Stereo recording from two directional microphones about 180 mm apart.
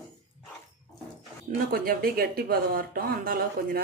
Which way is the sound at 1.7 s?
55° right (ahead or behind).